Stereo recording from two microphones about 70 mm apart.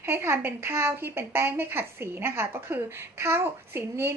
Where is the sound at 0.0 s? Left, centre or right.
Right.